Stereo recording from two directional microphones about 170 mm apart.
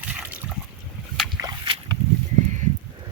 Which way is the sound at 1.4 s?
25° right (ahead or behind).